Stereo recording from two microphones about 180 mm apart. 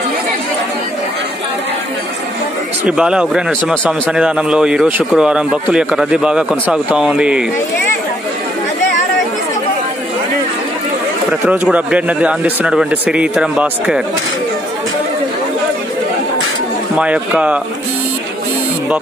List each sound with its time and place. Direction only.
2.8 s a man's voice: 5° right (ahead or behind)
11.4 s a man's voice: 10° right (ahead or behind)
16.9 s a man's voice: 5° right (ahead or behind)